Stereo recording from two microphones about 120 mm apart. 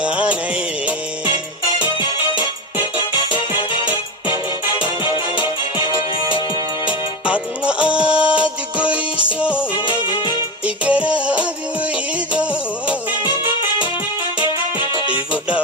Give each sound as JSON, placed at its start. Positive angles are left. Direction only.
{"t": 0.0, "sound": "music", "side_deg": -10}
{"t": 2.0, "sound": "music", "side_deg": 40}
{"t": 5.0, "sound": "music", "side_deg": 45}
{"t": 7.3, "sound": "music", "side_deg": -10}
{"t": 10.8, "sound": "music", "side_deg": -10}
{"t": 14.3, "sound": "music", "side_deg": 45}
{"t": 15.3, "sound": "music", "side_deg": -10}